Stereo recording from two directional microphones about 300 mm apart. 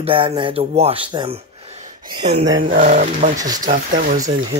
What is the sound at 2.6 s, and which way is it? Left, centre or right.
Speech, right.